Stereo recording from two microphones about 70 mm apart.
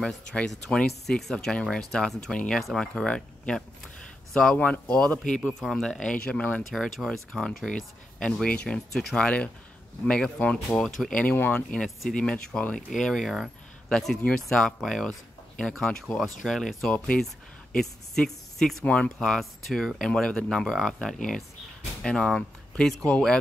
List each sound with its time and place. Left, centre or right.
0.0 s speech: centre
5.5 s speech: centre
6.7 s speech: centre
11.1 s speech: left
11.5 s speech: centre